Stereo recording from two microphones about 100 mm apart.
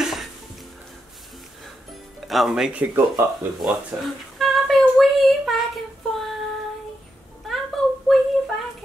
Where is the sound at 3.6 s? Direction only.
Centre (ahead or behind).